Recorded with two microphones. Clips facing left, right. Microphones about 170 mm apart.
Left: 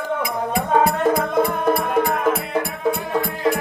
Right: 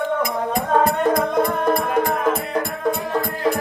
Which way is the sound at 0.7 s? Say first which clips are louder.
Even; 5° left (ahead or behind).